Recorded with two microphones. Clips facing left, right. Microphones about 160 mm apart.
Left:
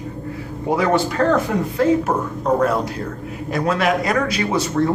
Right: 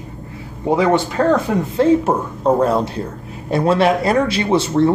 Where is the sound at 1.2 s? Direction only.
15° right (ahead or behind).